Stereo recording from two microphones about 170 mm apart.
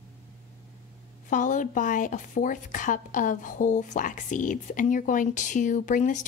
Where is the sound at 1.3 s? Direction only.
50° left (ahead or behind).